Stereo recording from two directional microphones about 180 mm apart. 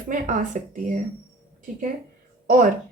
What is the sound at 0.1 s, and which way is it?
Speech, 45° right (ahead or behind).